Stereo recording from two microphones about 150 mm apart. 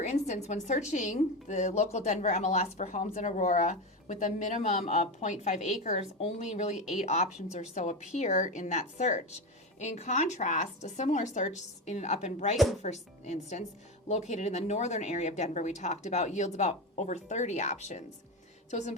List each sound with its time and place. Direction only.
0.0 s a woman's voice: 50° left (ahead or behind)